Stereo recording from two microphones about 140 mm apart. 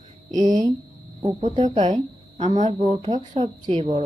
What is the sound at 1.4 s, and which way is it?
Speech, 50° right (ahead or behind).